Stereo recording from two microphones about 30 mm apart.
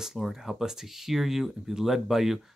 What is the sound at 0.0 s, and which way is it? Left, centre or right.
Speech, centre.